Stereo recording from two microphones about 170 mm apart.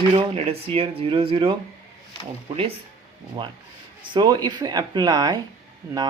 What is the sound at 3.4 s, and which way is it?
Speech, 30° right (ahead or behind).